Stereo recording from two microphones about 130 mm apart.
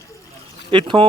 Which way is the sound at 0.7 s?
40° right (ahead or behind).